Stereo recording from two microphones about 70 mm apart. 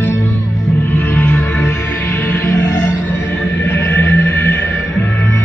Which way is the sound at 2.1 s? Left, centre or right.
Left.